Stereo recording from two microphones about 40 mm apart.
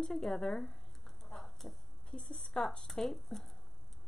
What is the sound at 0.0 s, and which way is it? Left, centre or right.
Speech, centre.